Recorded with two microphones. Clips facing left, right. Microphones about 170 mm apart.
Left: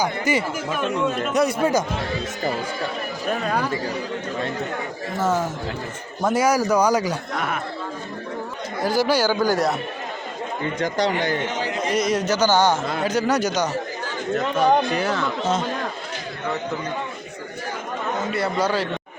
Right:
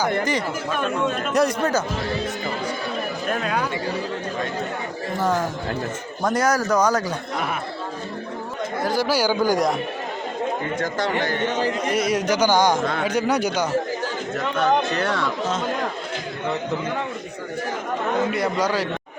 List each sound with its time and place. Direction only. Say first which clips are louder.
0.3 s speech: left 1 dB; 5° left (ahead or behind)
6.2 s speech: left 2 dB; 10° left (ahead or behind)
8.9 s speech: left 3 dB; centre (ahead or behind)
9.1 s speech: even; 10° right (ahead or behind)
10.8 s speech: left 4 dB; 20° left (ahead or behind)
11.9 s speech: left 2 dB; 10° right (ahead or behind)
12.8 s speech: right 1 dB; 5° left (ahead or behind)
13.1 s speech: left 3 dB; 10° right (ahead or behind)
14.5 s speech: left 1 dB; 10° left (ahead or behind)
18.5 s speech: even; 10° right (ahead or behind)